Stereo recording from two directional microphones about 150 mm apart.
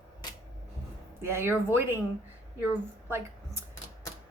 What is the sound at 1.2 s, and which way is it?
Speech, 15° right (ahead or behind).